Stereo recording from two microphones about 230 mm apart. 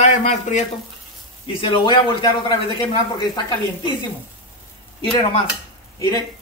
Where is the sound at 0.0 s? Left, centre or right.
Left.